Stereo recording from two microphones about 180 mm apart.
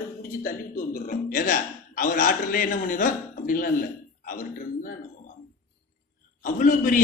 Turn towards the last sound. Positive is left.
turn(degrees=50)  # may be behind; listen again after turning